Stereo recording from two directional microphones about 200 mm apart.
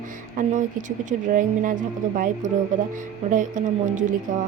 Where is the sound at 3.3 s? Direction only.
40° right (ahead or behind).